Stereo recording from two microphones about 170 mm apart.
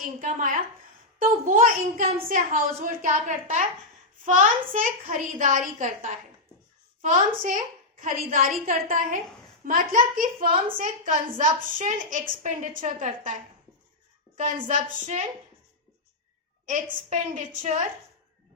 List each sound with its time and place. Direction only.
0.0 s a woman's voice: 50° right (ahead or behind)
16.6 s a woman's voice: 45° right (ahead or behind)